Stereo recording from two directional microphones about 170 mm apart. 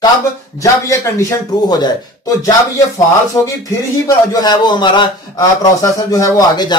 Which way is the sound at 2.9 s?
20° left (ahead or behind).